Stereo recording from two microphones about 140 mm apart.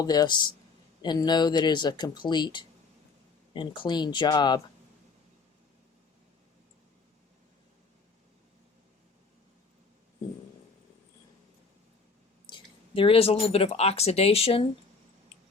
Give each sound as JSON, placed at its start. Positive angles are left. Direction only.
{"t": 0.0, "sound": "speech", "side_deg": 30}
{"t": 12.5, "sound": "speech", "side_deg": 35}